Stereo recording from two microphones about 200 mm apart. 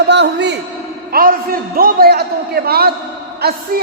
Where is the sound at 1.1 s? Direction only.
45° right (ahead or behind).